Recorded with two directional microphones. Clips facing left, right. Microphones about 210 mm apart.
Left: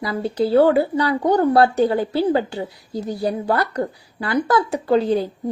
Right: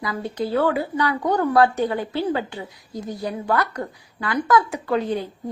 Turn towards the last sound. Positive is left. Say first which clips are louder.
# left 5 dB
turn(degrees=35)  # may be behind; listen again after turning